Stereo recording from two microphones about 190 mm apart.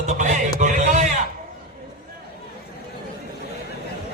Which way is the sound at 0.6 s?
40° right (ahead or behind).